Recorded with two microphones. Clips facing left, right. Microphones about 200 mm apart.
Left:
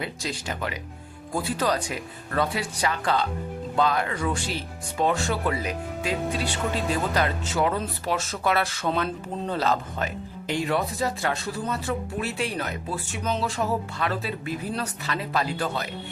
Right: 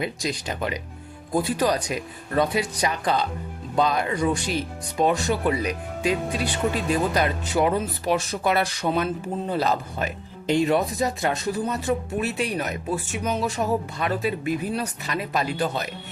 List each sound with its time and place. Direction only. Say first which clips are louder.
0.0 s speech: right 4 dB; 15° right (ahead or behind)